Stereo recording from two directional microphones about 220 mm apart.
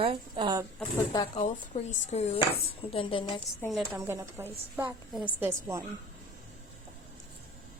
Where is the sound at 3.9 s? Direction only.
10° right (ahead or behind).